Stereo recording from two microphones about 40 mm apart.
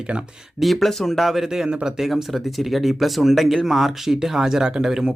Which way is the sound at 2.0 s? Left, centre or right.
Centre.